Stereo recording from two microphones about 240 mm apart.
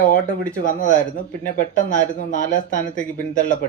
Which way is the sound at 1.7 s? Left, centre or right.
Left.